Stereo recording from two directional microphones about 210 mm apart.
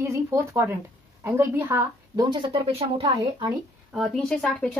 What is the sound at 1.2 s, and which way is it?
Speech, 10° right (ahead or behind).